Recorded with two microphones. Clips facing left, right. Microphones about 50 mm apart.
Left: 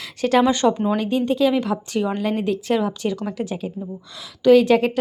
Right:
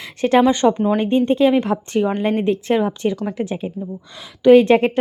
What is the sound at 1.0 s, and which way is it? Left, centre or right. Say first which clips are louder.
Speech: right 5 dB; right.